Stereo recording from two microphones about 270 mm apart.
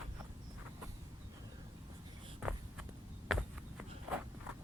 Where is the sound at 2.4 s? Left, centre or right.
Centre.